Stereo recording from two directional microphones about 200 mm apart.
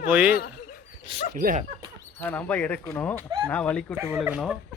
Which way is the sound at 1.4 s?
45° right (ahead or behind).